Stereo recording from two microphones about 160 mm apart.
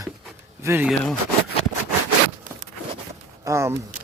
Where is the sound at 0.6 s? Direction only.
15° right (ahead or behind).